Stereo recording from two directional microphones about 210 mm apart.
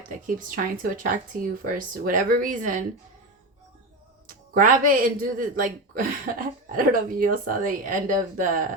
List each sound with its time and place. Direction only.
0.3 s speech: 40° right (ahead or behind)
4.3 s speech: 40° right (ahead or behind)